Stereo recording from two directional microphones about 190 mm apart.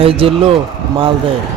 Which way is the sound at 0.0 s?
30° right (ahead or behind).